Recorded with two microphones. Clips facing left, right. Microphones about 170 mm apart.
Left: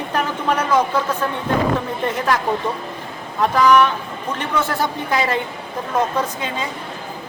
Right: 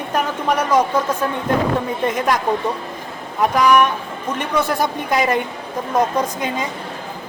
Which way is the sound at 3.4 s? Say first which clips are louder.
Even; 10° right (ahead or behind).